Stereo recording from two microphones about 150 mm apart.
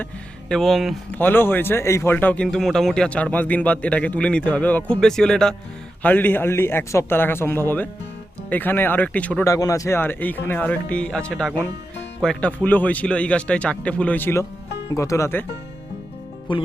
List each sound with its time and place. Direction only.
0.0 s speech: 5° left (ahead or behind)
1.1 s speech: 15° left (ahead or behind)
9.5 s speech: 20° left (ahead or behind)
16.5 s speech: 35° left (ahead or behind)